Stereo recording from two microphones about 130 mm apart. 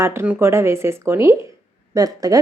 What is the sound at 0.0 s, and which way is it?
A woman's voice, 20° right (ahead or behind).